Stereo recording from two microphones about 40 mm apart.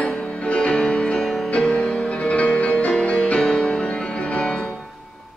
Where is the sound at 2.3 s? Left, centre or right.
Left.